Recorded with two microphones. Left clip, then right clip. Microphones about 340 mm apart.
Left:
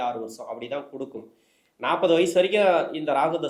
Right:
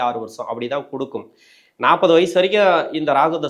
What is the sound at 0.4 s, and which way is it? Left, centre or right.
Speech, right.